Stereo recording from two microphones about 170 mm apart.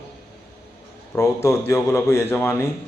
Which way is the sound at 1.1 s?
15° left (ahead or behind).